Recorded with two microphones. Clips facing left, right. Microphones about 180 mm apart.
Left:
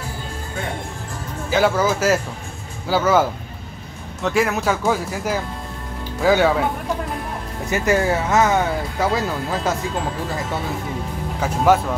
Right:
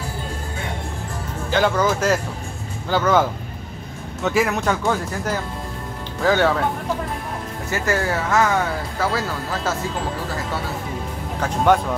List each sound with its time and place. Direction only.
1.5 s speech: 5° left (ahead or behind)
7.7 s speech: 20° left (ahead or behind)
11.4 s speech: 5° left (ahead or behind)